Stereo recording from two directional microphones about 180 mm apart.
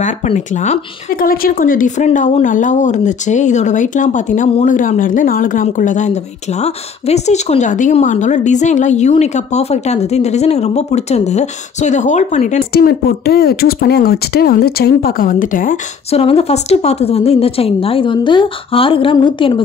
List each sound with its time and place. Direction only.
0.0 s speech: 40° left (ahead or behind)
1.2 s speech: 55° left (ahead or behind)
12.7 s speech: 60° left (ahead or behind)
16.1 s speech: 35° left (ahead or behind)